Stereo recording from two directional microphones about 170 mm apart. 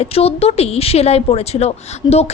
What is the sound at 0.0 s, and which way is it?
A woman's voice, 35° left (ahead or behind).